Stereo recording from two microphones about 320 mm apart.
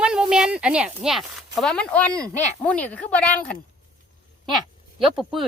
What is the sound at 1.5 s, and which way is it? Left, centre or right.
Speech, centre.